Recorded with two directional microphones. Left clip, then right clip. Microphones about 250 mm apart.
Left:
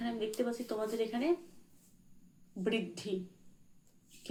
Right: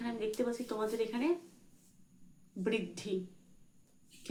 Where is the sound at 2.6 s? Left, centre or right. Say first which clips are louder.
Even; centre.